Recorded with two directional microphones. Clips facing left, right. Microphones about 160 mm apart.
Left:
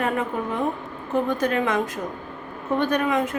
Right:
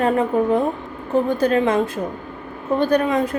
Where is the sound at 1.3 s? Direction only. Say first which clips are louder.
Right 6 dB; 30° right (ahead or behind).